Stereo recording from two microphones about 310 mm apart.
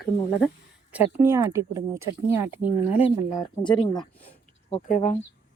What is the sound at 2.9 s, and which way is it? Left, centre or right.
Speech, centre.